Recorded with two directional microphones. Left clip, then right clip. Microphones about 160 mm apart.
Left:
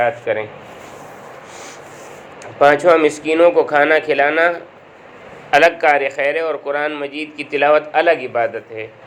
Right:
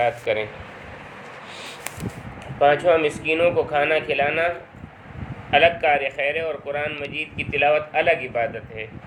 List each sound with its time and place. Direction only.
0.0 s speech: 5° left (ahead or behind)
2.6 s a man's voice: 30° left (ahead or behind)